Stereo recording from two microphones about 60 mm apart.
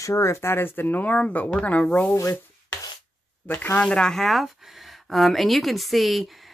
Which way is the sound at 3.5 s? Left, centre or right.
Left.